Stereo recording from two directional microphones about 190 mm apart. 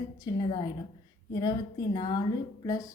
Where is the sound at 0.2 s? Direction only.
20° left (ahead or behind).